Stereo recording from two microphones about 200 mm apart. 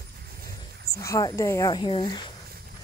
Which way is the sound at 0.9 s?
15° left (ahead or behind).